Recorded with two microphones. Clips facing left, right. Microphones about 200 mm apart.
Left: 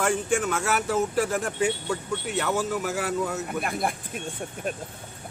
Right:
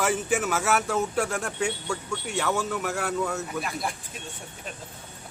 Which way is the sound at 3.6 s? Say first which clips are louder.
Left 4 dB; 55° left (ahead or behind).